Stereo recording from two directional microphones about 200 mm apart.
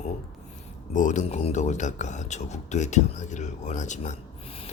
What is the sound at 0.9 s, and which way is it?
Speech, 40° left (ahead or behind).